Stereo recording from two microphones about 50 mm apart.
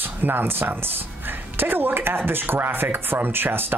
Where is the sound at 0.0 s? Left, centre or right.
Right.